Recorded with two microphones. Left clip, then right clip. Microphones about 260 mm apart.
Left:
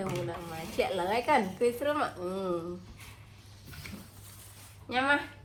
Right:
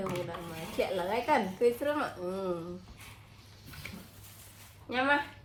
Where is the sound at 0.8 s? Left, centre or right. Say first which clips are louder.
Left 2 dB; left.